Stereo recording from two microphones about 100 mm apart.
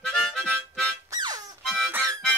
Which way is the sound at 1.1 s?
40° right (ahead or behind).